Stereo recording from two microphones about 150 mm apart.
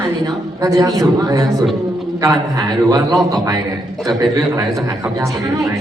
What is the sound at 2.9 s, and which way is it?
Speech, 25° right (ahead or behind).